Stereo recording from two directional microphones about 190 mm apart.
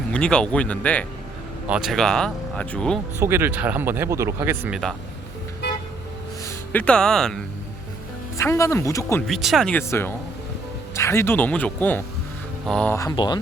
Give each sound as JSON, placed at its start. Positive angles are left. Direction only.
{"t": 0.1, "sound": "speech", "side_deg": 5}
{"t": 1.6, "sound": "speech", "side_deg": -5}
{"t": 3.2, "sound": "speech", "side_deg": -10}
{"t": 6.4, "sound": "speech", "side_deg": 5}
{"t": 8.4, "sound": "speech", "side_deg": 15}
{"t": 9.2, "sound": "speech", "side_deg": 0}
{"t": 13.0, "sound": "a sound", "side_deg": 20}